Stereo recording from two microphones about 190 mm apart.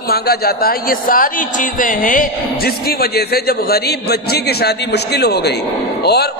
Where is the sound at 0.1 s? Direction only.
55° left (ahead or behind).